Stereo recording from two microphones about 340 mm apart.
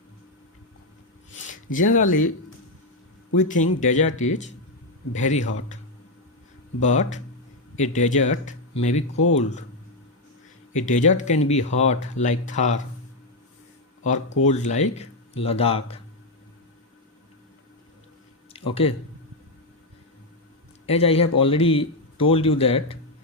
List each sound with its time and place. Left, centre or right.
1.7 s speech: left
3.3 s speech: left
6.8 s speech: left
10.8 s speech: left
14.0 s speech: left
18.5 s speech: centre
20.8 s speech: centre